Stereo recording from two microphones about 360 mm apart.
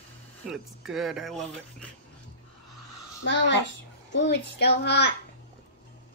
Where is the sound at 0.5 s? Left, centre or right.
Centre.